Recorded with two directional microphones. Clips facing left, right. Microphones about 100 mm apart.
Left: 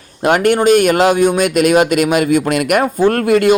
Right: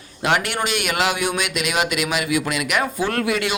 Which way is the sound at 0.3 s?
45° left (ahead or behind).